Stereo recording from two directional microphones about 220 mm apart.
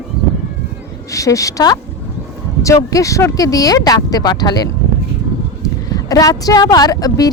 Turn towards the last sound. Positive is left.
turn(degrees=15)  # may be behind; listen again after turning